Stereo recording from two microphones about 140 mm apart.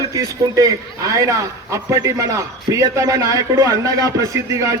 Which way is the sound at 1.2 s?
20° right (ahead or behind).